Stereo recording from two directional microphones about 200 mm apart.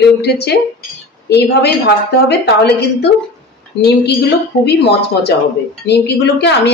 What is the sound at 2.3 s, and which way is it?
Speech, 55° left (ahead or behind).